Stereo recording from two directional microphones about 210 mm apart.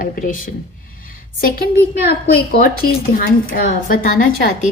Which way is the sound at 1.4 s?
45° left (ahead or behind).